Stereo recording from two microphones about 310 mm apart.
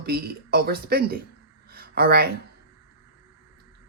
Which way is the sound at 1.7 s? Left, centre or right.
Right.